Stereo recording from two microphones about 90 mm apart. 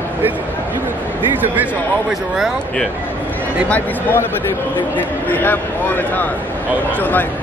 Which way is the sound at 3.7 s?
20° left (ahead or behind).